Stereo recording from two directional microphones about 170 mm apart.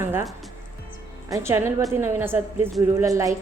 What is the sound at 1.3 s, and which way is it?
A woman's voice, 15° right (ahead or behind).